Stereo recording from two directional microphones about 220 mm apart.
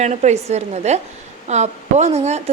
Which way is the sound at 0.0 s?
30° right (ahead or behind).